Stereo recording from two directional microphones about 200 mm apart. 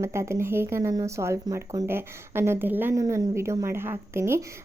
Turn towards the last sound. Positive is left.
turn(degrees=-15)  # may be behind; listen again after turning